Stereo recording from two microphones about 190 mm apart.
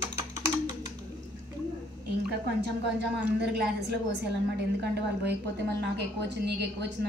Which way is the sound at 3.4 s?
65° right (ahead or behind).